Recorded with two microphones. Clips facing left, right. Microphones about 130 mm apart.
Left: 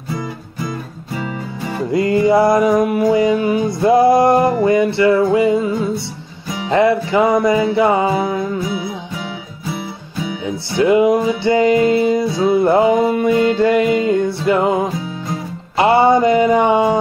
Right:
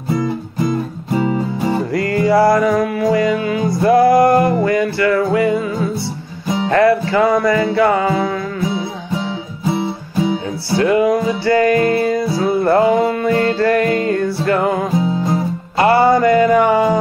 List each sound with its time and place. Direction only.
0.7 s music: 35° right (ahead or behind)
1.9 s music: 20° left (ahead or behind)
8.6 s music: 30° right (ahead or behind)
10.7 s music: 20° left (ahead or behind)
15.0 s music: 30° right (ahead or behind)
15.8 s music: 20° left (ahead or behind)